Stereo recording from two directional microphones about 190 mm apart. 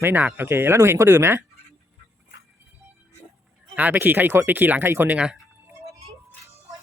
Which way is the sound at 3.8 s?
10° right (ahead or behind).